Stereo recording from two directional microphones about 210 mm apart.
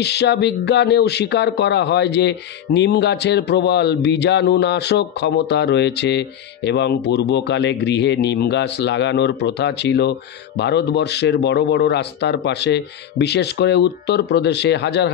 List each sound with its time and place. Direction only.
0.0 s speech: 55° left (ahead or behind)